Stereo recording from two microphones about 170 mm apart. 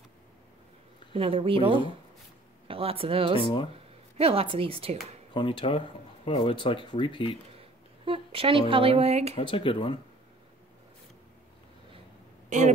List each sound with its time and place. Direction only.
1.1 s a woman's voice: 35° right (ahead or behind)
3.3 s speech: 30° left (ahead or behind)
4.2 s a woman's voice: 35° right (ahead or behind)
5.3 s speech: 30° left (ahead or behind)
8.0 s a woman's voice: 30° right (ahead or behind)
9.4 s speech: 30° left (ahead or behind)
12.4 s speech: 45° right (ahead or behind)